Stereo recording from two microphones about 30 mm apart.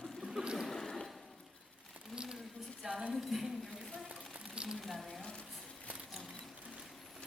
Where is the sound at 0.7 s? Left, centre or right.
Centre.